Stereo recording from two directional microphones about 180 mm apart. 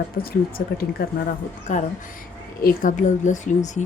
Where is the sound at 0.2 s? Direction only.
55° left (ahead or behind).